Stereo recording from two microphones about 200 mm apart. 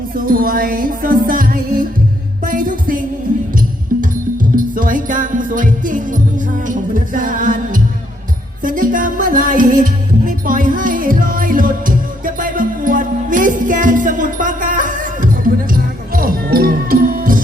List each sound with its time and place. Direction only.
0.2 s music: 45° right (ahead or behind)
4.5 s music: 40° right (ahead or behind)